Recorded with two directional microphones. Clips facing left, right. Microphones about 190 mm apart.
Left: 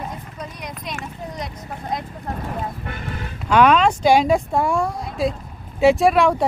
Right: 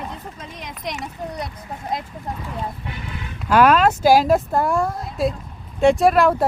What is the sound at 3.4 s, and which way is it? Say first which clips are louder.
Speech: even; 5° right (ahead or behind).